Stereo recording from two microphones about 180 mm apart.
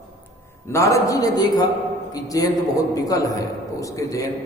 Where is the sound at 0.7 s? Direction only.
15° left (ahead or behind).